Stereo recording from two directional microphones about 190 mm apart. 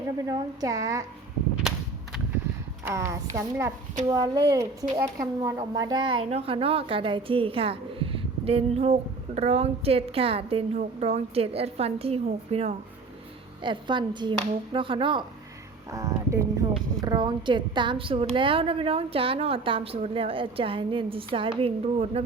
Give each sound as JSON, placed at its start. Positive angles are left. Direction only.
{"t": 0.3, "sound": "a woman's voice", "side_deg": -20}
{"t": 2.8, "sound": "a woman's voice", "side_deg": -15}